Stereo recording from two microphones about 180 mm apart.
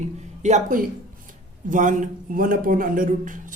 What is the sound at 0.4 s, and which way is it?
Speech, 45° right (ahead or behind).